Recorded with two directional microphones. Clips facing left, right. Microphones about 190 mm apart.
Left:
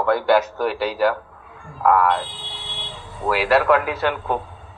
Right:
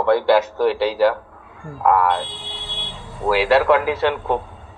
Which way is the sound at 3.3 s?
25° right (ahead or behind).